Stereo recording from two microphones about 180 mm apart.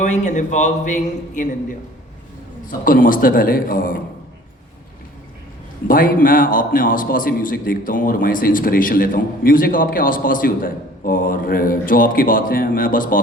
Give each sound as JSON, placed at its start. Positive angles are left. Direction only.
{"t": 0.0, "sound": "a man's voice", "side_deg": 40}
{"t": 2.6, "sound": "a man's voice", "side_deg": 50}
{"t": 5.9, "sound": "a man's voice", "side_deg": 50}